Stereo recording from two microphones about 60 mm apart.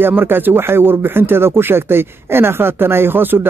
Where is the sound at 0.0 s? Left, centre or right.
Right.